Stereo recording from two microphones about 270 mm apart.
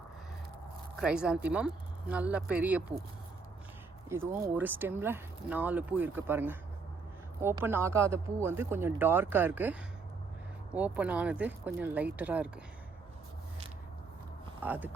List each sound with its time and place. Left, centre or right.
0.9 s speech: centre
4.1 s speech: centre
10.8 s speech: centre
14.6 s speech: centre